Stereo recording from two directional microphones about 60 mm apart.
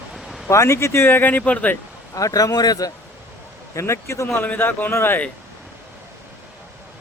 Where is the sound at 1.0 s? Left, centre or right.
Left.